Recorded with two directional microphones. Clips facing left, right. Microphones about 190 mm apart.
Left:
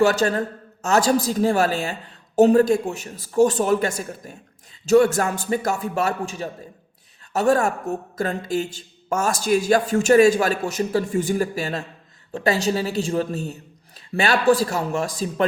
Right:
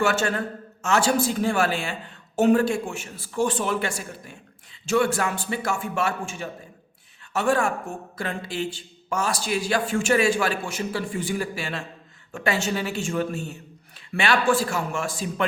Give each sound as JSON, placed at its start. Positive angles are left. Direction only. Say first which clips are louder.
{"t": 0.0, "sound": "a woman's voice", "louder": "left 5 dB", "side_deg": 35}